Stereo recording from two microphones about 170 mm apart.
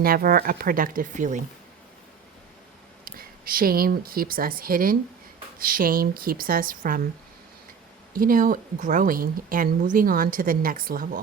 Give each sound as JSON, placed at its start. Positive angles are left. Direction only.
{"t": 0.0, "sound": "a woman's voice", "side_deg": -60}
{"t": 3.0, "sound": "a woman's voice", "side_deg": -60}
{"t": 8.1, "sound": "a woman's voice", "side_deg": -55}